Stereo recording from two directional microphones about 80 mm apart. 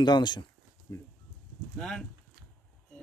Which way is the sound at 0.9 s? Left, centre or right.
Left.